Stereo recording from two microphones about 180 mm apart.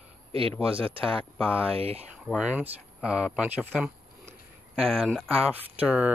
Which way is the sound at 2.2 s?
5° right (ahead or behind).